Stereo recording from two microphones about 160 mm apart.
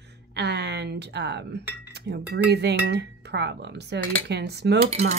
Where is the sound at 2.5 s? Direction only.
90° right.